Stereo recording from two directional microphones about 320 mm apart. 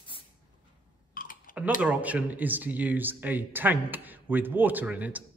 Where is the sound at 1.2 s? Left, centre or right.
Left.